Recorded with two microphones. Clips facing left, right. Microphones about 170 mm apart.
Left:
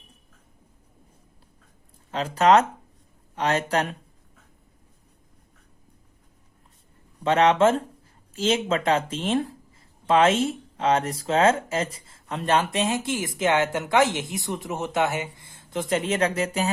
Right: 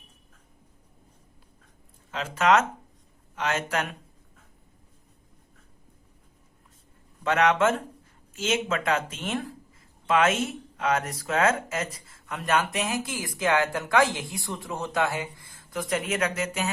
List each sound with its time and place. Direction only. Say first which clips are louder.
2.0 s speech: left 4 dB; 35° left (ahead or behind)
7.3 s speech: left 4 dB; 30° left (ahead or behind)